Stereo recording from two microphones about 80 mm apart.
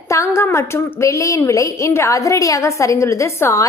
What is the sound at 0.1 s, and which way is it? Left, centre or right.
A woman's voice, left.